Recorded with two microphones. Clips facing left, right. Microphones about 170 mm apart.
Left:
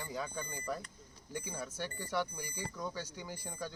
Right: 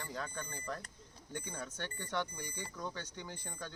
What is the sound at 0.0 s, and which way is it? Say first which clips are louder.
Speech: left 2 dB; 10° left (ahead or behind).